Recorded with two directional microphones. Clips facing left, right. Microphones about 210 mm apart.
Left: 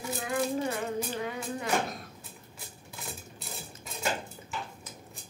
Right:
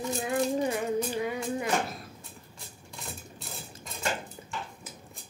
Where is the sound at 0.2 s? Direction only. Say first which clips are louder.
Right 2 dB; 20° right (ahead or behind).